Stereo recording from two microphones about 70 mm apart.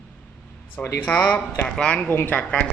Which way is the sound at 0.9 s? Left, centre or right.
Left.